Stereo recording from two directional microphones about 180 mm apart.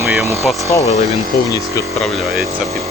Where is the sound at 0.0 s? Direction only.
10° right (ahead or behind).